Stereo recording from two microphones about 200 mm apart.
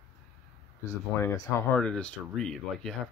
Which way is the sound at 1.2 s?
10° left (ahead or behind).